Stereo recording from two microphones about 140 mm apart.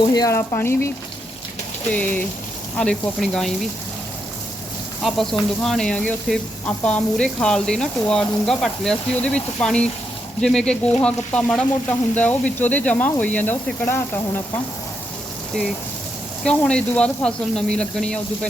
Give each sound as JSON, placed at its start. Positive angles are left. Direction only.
{"t": 0.1, "sound": "speech", "side_deg": 25}
{"t": 0.3, "sound": "speech", "side_deg": 15}
{"t": 1.9, "sound": "speech", "side_deg": 10}
{"t": 5.0, "sound": "speech", "side_deg": 0}
{"t": 16.4, "sound": "speech", "side_deg": 5}